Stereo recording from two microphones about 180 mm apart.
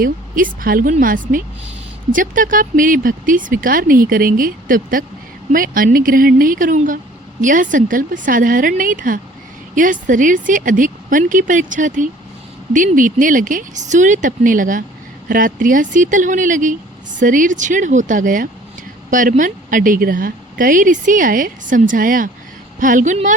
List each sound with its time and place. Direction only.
0.0 s a woman's voice: 50° right (ahead or behind)